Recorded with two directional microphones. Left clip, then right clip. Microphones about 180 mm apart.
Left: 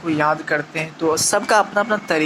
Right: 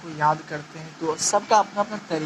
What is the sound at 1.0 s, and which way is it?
Speech, 40° left (ahead or behind).